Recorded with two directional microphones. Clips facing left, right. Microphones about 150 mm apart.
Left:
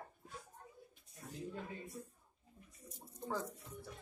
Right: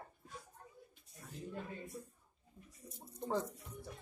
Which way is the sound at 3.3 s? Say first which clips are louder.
Right 4 dB; 20° right (ahead or behind).